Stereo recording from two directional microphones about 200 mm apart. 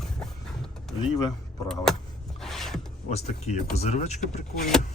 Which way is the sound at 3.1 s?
30° left (ahead or behind).